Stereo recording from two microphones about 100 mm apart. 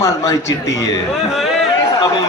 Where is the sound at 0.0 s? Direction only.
35° left (ahead or behind).